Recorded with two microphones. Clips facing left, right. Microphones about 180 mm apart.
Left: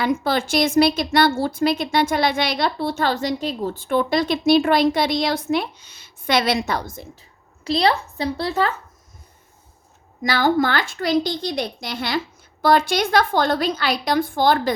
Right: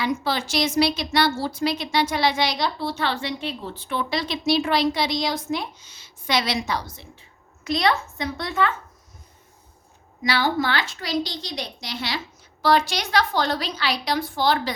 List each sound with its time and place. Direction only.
0.0 s a woman's voice: 50° left (ahead or behind); by 8.7 s 35° left (ahead or behind)
10.2 s a woman's voice: 45° left (ahead or behind)